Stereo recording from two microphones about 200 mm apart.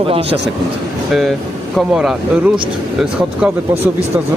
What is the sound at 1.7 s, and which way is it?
Speech, 5° right (ahead or behind).